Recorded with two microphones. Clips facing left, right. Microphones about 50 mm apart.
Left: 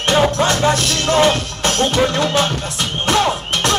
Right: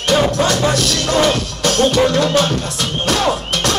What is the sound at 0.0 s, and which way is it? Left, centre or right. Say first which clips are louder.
Music: even; left.